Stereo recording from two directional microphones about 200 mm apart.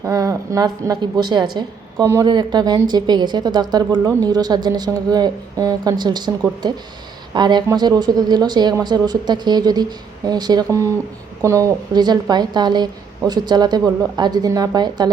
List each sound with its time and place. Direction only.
0.0 s a woman's voice: 15° right (ahead or behind)
7.3 s a woman's voice: 20° right (ahead or behind)